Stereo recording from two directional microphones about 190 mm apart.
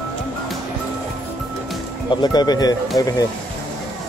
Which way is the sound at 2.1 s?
20° left (ahead or behind).